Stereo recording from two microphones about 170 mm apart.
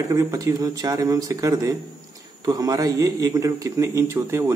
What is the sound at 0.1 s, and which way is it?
A man's voice, 20° right (ahead or behind).